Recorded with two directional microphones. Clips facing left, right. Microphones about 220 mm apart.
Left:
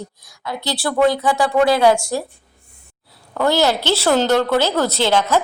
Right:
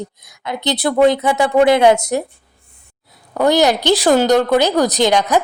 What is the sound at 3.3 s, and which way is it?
Speech, 15° right (ahead or behind).